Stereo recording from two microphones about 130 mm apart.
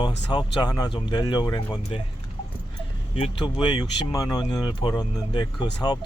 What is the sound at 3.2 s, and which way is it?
Speech, 40° left (ahead or behind).